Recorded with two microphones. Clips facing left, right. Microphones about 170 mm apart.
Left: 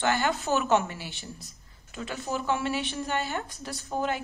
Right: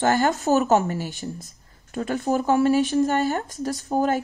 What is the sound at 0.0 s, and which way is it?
Speech, 45° right (ahead or behind).